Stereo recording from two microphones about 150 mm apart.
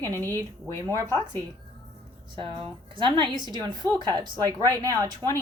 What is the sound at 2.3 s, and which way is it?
A woman's voice, 35° right (ahead or behind).